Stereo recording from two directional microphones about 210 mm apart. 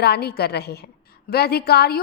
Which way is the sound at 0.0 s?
50° left (ahead or behind).